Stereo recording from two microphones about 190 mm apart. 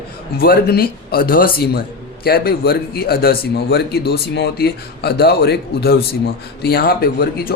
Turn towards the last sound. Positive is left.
turn(degrees=55)  # may be behind; listen again after turning